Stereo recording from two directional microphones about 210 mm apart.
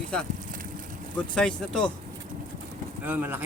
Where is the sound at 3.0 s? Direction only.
10° right (ahead or behind).